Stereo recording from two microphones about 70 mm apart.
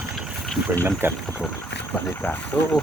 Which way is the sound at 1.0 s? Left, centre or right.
Right.